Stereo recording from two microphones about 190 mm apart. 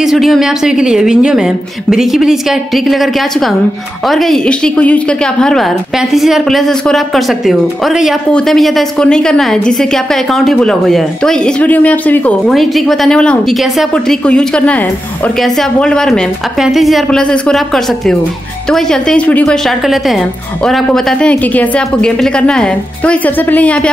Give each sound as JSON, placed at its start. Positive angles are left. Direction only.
{"t": 0.0, "sound": "speech", "side_deg": 0}